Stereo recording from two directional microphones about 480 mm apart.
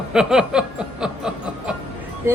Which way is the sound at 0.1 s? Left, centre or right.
Centre.